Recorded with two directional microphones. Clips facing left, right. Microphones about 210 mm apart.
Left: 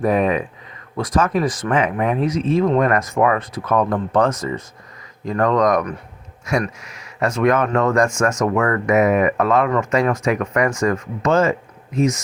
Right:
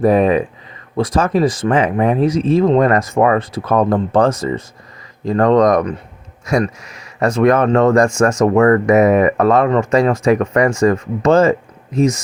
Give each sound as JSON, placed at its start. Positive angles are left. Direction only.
{"t": 0.0, "sound": "speech", "side_deg": -35}